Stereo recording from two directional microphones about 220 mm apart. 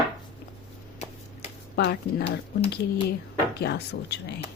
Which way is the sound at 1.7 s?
45° left (ahead or behind).